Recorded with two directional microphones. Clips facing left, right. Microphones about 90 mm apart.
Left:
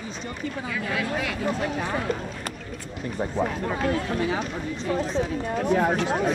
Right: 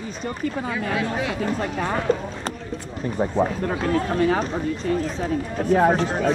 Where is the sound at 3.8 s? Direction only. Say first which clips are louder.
Right 5 dB; 40° right (ahead or behind).